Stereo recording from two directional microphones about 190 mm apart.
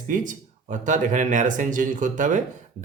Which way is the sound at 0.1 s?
40° right (ahead or behind).